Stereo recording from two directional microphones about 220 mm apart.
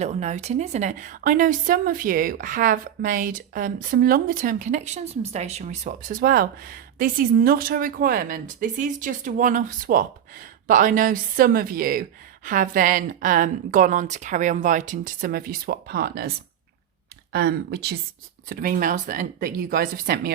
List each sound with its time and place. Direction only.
0.0 s a woman's voice: 30° right (ahead or behind)
17.3 s a woman's voice: 45° right (ahead or behind)